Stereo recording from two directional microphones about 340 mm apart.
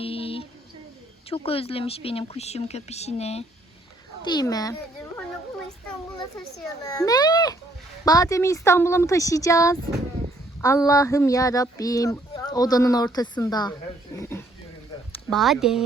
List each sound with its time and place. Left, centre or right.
0.0 s a sound: centre
1.3 s speech: centre
6.8 s speech: centre
10.8 s speech: centre